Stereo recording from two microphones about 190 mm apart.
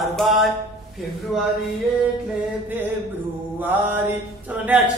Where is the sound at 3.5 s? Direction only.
10° right (ahead or behind).